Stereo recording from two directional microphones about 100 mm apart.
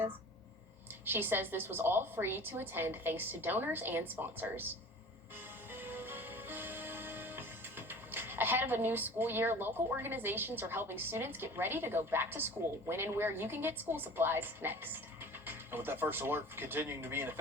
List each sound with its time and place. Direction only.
1.0 s a woman's voice: 20° right (ahead or behind)
5.7 s music: 20° right (ahead or behind)